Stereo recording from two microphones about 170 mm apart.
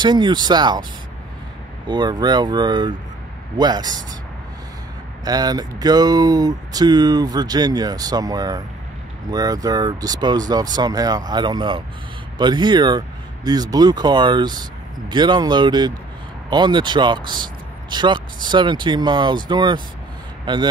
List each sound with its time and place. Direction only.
0.0 s speech: 25° right (ahead or behind)
1.9 s speech: 25° right (ahead or behind)
5.2 s speech: 25° right (ahead or behind)